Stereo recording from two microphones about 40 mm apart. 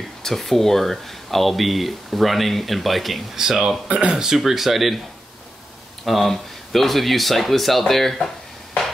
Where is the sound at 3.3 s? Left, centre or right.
Centre.